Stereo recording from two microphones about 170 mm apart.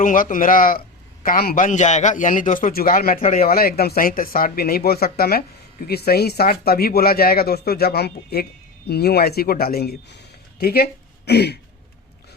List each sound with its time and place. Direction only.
0.0 s a man's voice: 50° left (ahead or behind)
3.2 s speech: 40° left (ahead or behind)
3.4 s speech: 60° left (ahead or behind)